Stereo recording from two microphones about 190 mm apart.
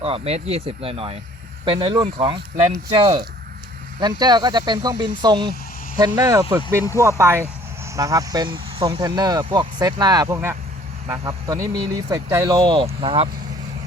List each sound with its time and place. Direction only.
0.0 s speech: 30° right (ahead or behind)